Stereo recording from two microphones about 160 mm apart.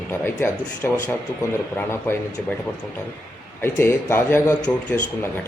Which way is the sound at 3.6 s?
15° left (ahead or behind).